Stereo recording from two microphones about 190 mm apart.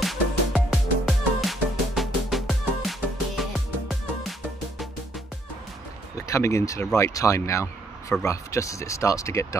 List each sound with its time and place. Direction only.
0.0 s music: centre (ahead or behind)
6.1 s speech: 15° left (ahead or behind)